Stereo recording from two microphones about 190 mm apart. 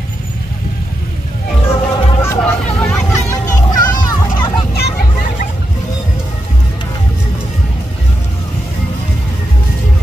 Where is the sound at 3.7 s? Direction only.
45° left (ahead or behind).